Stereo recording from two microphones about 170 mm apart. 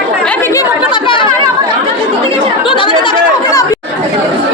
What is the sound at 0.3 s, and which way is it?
Chatter, 15° left (ahead or behind).